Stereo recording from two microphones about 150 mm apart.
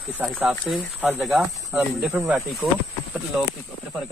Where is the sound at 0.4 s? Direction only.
Centre (ahead or behind).